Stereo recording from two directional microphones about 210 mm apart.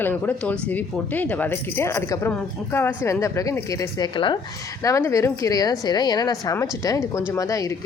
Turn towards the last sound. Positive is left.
turn(degrees=15)  # may be behind; listen again after turning